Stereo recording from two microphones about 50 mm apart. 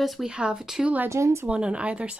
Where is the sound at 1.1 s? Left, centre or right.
Right.